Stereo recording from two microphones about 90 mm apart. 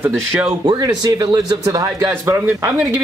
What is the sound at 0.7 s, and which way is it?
Speech, 55° right (ahead or behind).